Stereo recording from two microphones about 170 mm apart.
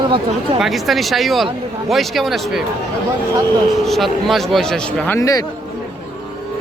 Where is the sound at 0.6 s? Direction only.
Centre (ahead or behind).